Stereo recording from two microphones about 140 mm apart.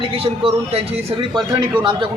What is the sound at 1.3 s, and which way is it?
Speech, 35° right (ahead or behind).